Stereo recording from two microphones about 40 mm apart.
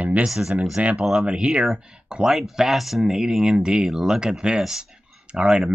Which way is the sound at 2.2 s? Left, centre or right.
Centre.